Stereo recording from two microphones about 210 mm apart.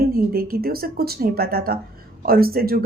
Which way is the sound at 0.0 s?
45° right (ahead or behind).